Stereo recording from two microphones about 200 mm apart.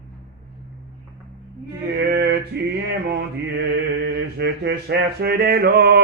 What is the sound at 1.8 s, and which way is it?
Mantra, 55° right (ahead or behind).